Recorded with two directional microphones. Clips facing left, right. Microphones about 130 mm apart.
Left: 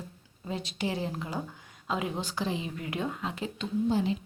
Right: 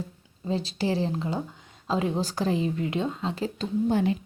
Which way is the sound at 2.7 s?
25° right (ahead or behind).